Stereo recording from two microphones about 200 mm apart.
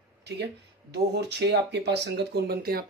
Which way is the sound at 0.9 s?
55° right (ahead or behind).